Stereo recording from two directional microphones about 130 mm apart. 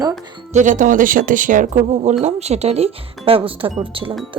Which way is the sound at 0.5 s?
75° right (ahead or behind).